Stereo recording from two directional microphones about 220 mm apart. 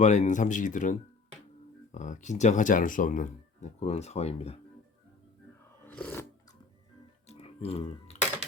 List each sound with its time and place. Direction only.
0.0 s speech: 35° left (ahead or behind)
5.8 s filing: 5° left (ahead or behind)
7.3 s a sound: 25° left (ahead or behind)